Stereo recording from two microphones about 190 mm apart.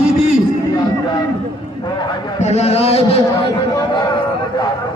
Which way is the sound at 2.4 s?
35° left (ahead or behind).